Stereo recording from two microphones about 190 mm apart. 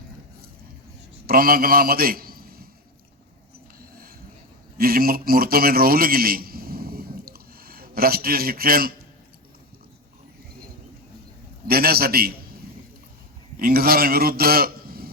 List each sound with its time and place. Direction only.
1.3 s a man's voice: 50° right (ahead or behind)
3.8 s a sound: 50° right (ahead or behind)
4.8 s a man's voice: 50° right (ahead or behind)
11.7 s a man's voice: 55° right (ahead or behind)
13.6 s a man's voice: 50° right (ahead or behind)